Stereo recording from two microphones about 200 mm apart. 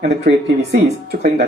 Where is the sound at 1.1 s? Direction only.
50° right (ahead or behind).